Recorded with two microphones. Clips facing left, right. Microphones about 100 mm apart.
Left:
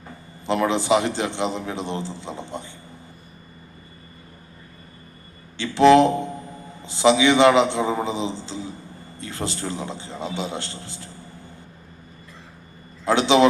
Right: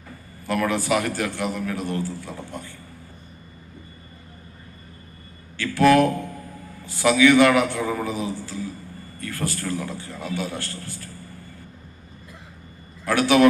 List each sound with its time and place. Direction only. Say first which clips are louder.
0.4 s a man's voice: left 2 dB; 20° left (ahead or behind)
5.5 s a man's voice: left 3 dB; 20° left (ahead or behind)
13.1 s a man's voice: even; 20° left (ahead or behind)